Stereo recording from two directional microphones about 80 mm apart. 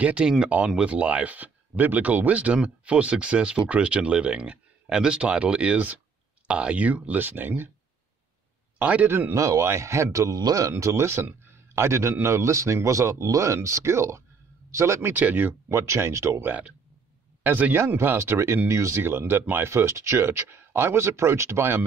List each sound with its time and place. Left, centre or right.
0.0 s speech: centre
8.7 s speech: right
9.3 s a man's voice: right
10.7 s a man's voice: right
15.7 s a man's voice: right
17.4 s a man's voice: right